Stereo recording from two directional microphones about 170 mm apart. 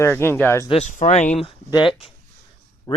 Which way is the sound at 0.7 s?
45° left (ahead or behind).